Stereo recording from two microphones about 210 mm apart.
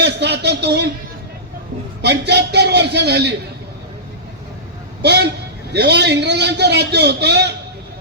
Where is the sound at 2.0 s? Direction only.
55° right (ahead or behind).